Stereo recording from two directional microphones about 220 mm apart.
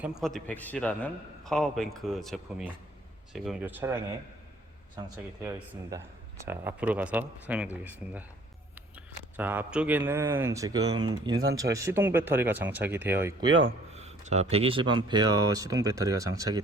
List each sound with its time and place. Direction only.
0.0 s a man's voice: centre (ahead or behind)
9.4 s speech: 5° right (ahead or behind)
13.9 s speech: 30° right (ahead or behind)